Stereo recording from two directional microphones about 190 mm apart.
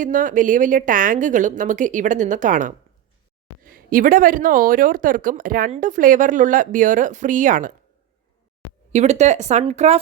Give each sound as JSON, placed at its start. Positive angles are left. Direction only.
{"t": 0.0, "sound": "a woman's voice", "side_deg": -45}
{"t": 8.9, "sound": "speech", "side_deg": -35}